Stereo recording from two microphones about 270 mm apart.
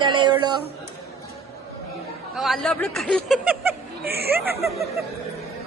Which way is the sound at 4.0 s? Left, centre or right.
Right.